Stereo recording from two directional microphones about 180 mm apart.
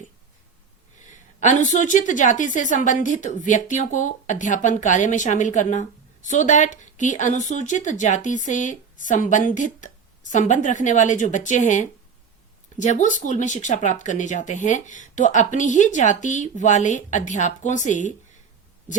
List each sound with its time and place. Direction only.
1.4 s speech: 40° left (ahead or behind)